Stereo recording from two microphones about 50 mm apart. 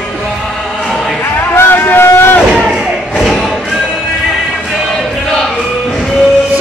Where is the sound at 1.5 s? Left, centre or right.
Left.